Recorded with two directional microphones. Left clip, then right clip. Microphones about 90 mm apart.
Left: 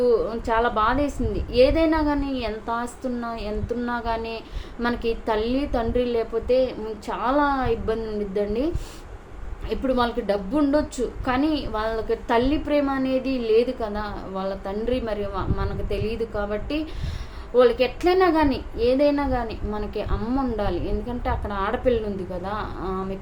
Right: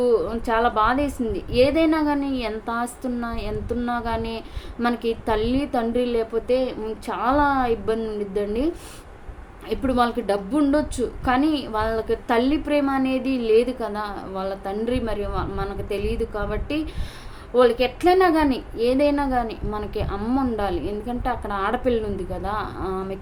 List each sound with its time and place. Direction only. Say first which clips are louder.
0.0 s a woman's voice: even; 35° right (ahead or behind)